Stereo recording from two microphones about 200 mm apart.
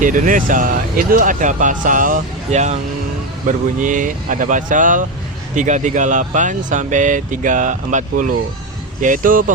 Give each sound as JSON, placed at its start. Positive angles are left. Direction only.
{"t": 0.0, "sound": "speech", "side_deg": -40}